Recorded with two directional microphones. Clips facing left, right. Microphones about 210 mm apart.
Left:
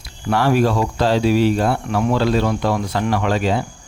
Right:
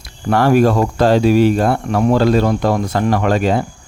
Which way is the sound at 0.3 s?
50° right (ahead or behind).